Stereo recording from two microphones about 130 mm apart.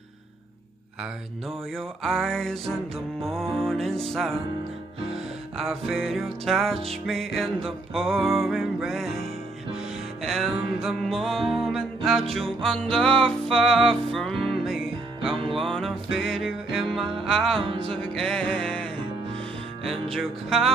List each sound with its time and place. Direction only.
1.8 s music: 5° left (ahead or behind)
5.6 s music: centre (ahead or behind)
17.6 s music: 45° right (ahead or behind)
18.1 s music: 5° left (ahead or behind)